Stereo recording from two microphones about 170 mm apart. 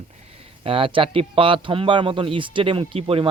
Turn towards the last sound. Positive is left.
turn(degrees=-30)  # may be behind; listen again after turning